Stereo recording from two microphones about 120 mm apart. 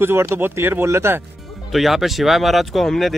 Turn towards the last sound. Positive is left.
turn(degrees=0)  # may be behind; listen again after turning